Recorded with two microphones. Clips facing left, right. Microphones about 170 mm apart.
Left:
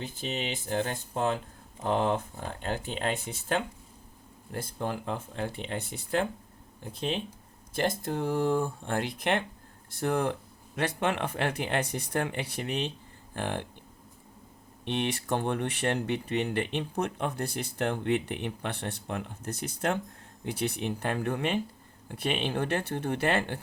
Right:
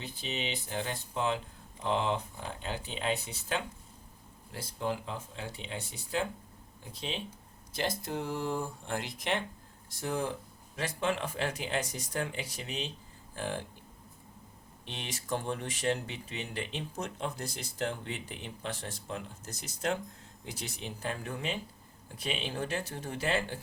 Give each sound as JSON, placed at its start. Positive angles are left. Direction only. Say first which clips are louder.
{"t": 0.0, "sound": "speech", "louder": "left 4 dB", "side_deg": 50}
{"t": 14.8, "sound": "speech", "louder": "left 8 dB", "side_deg": 60}